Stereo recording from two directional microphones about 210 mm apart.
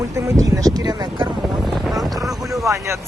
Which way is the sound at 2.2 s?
15° right (ahead or behind).